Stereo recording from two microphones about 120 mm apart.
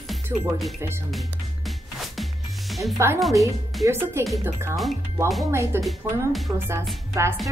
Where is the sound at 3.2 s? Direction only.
Centre (ahead or behind).